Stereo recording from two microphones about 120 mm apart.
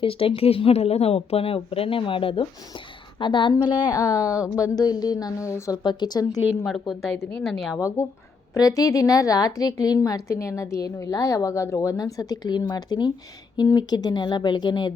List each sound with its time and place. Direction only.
0.0 s speech: 50° left (ahead or behind); by 6.4 s 35° left (ahead or behind)
6.7 s a woman's voice: centre (ahead or behind)
7.2 s a woman's voice: 15° left (ahead or behind)
7.4 s a woman's voice: centre (ahead or behind)
7.8 s a woman's voice: 25° left (ahead or behind)